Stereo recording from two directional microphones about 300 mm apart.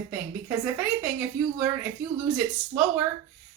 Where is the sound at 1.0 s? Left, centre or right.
Centre.